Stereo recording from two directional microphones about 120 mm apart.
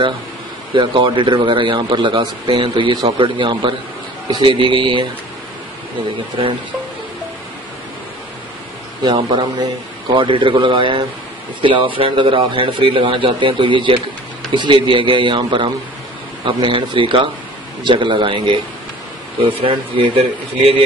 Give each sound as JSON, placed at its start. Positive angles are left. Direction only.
{"t": 0.7, "sound": "a man's voice", "side_deg": -45}
{"t": 9.0, "sound": "a man's voice", "side_deg": -40}
{"t": 19.6, "sound": "a man's voice", "side_deg": -50}